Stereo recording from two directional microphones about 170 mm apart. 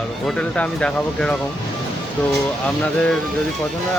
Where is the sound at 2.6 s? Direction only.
5° left (ahead or behind).